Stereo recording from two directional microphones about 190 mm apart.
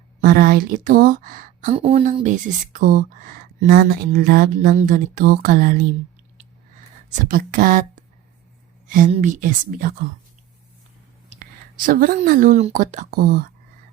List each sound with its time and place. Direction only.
0.2 s speech: 45° right (ahead or behind)
1.7 s speech: 30° right (ahead or behind); by 5.8 s 45° right (ahead or behind)
7.3 s speech: 45° right (ahead or behind)
11.8 s speech: 45° right (ahead or behind)